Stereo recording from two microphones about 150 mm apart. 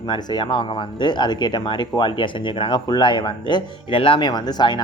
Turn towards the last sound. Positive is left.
turn(degrees=30)  # may be behind; listen again after turning